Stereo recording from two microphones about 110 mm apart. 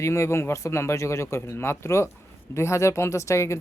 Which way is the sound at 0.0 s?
25° left (ahead or behind).